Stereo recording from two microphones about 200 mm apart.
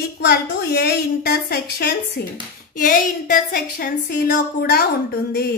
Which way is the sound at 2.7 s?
40° left (ahead or behind).